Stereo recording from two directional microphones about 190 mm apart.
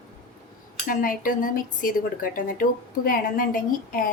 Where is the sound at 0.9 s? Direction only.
45° left (ahead or behind).